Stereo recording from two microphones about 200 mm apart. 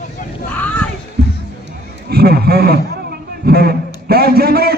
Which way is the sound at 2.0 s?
50° right (ahead or behind).